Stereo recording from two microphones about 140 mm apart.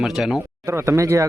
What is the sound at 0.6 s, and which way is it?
Speech, 20° right (ahead or behind).